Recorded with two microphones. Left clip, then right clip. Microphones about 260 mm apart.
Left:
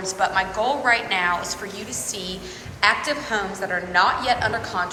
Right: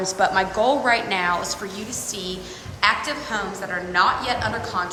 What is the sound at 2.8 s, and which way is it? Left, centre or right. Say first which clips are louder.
A woman's voice: left 1 dB; centre.